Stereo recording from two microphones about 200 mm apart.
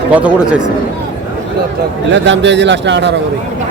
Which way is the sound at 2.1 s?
65° right (ahead or behind).